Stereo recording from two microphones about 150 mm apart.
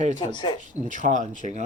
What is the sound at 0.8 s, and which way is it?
Speech, 55° right (ahead or behind).